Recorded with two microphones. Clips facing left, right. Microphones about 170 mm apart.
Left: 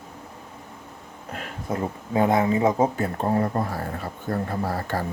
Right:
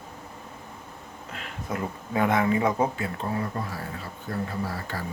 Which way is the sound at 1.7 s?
30° left (ahead or behind).